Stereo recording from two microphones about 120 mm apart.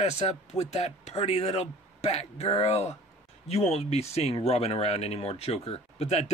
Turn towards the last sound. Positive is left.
turn(degrees=65)  # may be behind; listen again after turning